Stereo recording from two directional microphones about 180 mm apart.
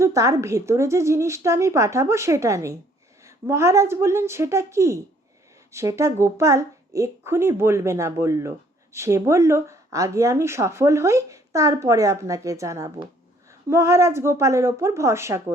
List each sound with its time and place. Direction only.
0.0 s a woman's voice: 15° right (ahead or behind)